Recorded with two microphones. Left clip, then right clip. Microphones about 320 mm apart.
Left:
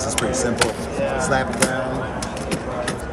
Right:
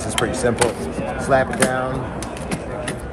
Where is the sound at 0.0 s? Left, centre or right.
Centre.